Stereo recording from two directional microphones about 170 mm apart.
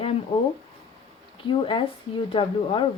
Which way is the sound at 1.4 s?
30° left (ahead or behind).